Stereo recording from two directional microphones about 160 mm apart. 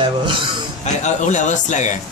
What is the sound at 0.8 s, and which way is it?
A man's voice, 50° left (ahead or behind).